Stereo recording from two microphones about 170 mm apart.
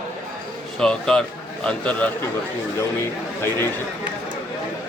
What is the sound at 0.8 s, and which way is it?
Speech, 5° left (ahead or behind).